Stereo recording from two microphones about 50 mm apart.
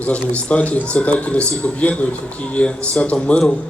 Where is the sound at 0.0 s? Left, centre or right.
Left.